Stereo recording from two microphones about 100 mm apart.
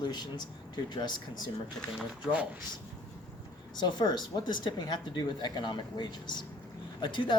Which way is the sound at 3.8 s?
45° left (ahead or behind).